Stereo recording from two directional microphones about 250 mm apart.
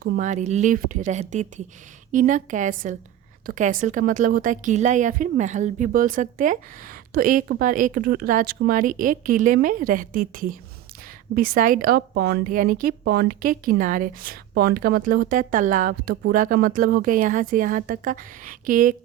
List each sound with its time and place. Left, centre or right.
0.0 s a woman's voice: right